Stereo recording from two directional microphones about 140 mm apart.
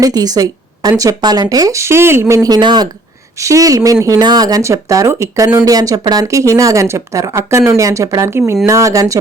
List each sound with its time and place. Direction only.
0.0 s speech: 25° right (ahead or behind)